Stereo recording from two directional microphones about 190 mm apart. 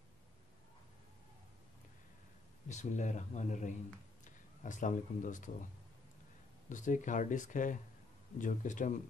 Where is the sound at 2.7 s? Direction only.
40° left (ahead or behind).